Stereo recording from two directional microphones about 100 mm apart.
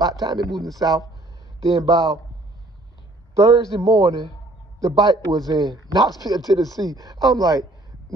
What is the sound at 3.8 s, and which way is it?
Speech, 35° right (ahead or behind).